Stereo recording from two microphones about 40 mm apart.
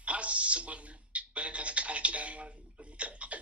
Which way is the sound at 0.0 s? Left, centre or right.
Right.